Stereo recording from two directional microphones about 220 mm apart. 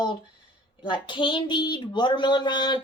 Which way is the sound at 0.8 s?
20° left (ahead or behind).